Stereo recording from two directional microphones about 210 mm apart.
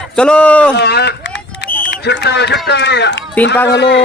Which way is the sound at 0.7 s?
50° left (ahead or behind).